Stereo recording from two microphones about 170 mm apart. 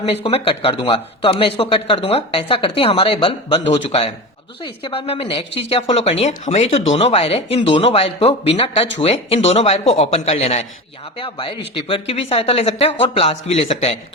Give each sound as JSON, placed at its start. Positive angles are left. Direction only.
{"t": 0.0, "sound": "speech", "side_deg": 35}